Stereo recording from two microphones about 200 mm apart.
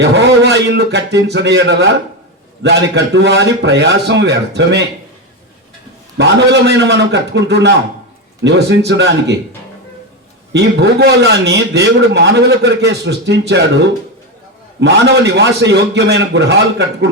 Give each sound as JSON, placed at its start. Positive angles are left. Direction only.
{"t": 0.0, "sound": "a man's voice", "side_deg": -60}
{"t": 6.1, "sound": "a man's voice", "side_deg": -60}
{"t": 10.5, "sound": "a man's voice", "side_deg": -55}